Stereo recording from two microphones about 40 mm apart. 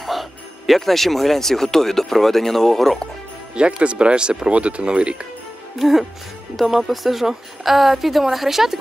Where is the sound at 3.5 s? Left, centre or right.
Right.